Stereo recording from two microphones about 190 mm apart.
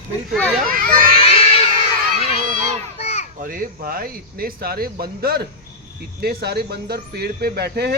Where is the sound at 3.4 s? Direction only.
45° right (ahead or behind).